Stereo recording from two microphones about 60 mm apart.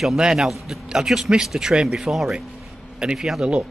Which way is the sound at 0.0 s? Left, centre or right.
Centre.